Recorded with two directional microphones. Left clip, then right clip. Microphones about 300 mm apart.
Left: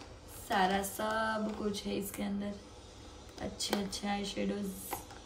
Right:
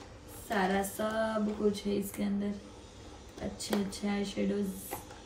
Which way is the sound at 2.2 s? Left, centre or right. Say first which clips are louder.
Right 3 dB; centre.